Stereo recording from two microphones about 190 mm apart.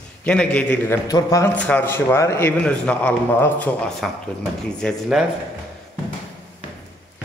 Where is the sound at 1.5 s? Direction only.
5° left (ahead or behind).